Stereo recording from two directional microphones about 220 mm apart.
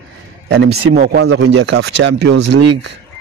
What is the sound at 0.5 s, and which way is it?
Speech, 50° right (ahead or behind).